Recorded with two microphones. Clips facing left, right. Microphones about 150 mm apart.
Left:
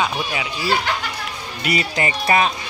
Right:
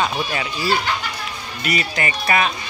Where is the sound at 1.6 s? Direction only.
25° left (ahead or behind).